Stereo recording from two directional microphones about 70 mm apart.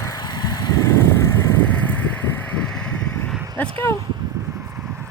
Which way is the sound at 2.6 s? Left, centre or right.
Centre.